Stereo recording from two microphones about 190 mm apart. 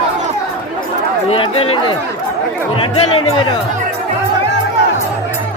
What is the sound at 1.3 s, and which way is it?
Speech, 30° left (ahead or behind).